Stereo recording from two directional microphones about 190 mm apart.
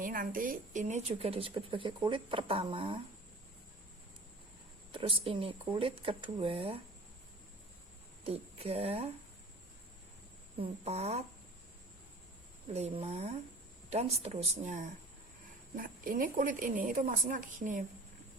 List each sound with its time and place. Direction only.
0.0 s speech: 45° right (ahead or behind); by 3.0 s 25° right (ahead or behind)
4.9 s speech: 25° right (ahead or behind)
8.2 s speech: 30° right (ahead or behind)
10.6 s speech: 35° right (ahead or behind)
12.7 s speech: 30° right (ahead or behind)